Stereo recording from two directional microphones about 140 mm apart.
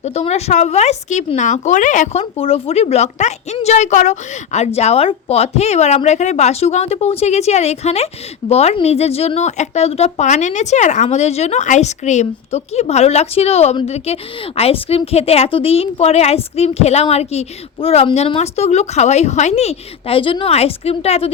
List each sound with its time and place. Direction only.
0.0 s speech: 50° left (ahead or behind)